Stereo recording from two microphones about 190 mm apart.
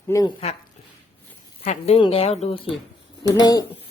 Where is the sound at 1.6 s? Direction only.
30° left (ahead or behind).